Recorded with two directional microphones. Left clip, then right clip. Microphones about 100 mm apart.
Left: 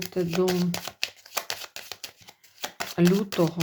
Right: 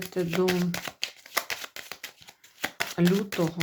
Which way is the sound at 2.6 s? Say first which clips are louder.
Left 2 dB; 20° left (ahead or behind).